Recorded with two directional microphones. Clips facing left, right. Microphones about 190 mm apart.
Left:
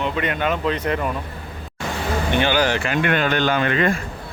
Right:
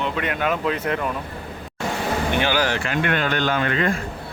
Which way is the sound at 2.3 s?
5° right (ahead or behind).